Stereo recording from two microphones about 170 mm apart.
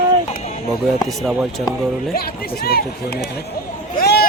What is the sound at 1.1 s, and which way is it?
Speech, centre (ahead or behind).